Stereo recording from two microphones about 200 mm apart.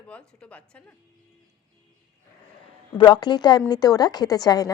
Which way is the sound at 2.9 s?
20° left (ahead or behind).